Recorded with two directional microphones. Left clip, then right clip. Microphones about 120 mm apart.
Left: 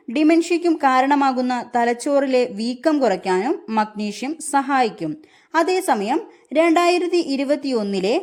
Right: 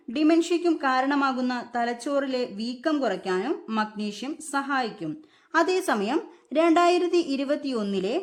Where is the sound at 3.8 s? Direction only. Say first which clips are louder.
Left 6 dB; 35° left (ahead or behind).